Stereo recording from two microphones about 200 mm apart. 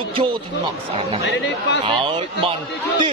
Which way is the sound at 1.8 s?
25° right (ahead or behind).